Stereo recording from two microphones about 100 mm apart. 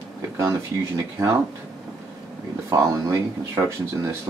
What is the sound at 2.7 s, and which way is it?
Speech, 30° right (ahead or behind).